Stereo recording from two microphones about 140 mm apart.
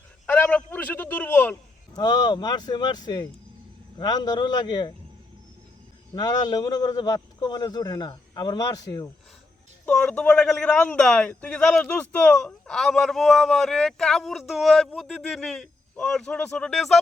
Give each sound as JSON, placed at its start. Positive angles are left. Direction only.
{"t": 0.3, "sound": "a sound", "side_deg": 10}
{"t": 2.0, "sound": "a man's voice", "side_deg": 30}
{"t": 6.1, "sound": "a man's voice", "side_deg": 25}
{"t": 9.8, "sound": "a man's voice", "side_deg": 5}